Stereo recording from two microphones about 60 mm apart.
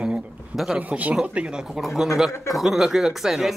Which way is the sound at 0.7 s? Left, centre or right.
Right.